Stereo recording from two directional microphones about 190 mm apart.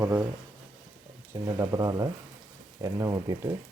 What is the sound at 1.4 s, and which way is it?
Speech, 15° right (ahead or behind).